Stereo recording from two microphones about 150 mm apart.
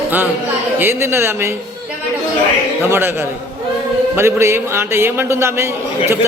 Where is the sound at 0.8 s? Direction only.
15° right (ahead or behind).